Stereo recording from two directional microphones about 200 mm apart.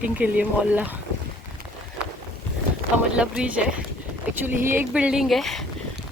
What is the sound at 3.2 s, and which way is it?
Speech, 5° right (ahead or behind).